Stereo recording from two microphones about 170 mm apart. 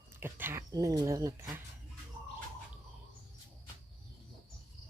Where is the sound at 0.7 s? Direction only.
25° right (ahead or behind).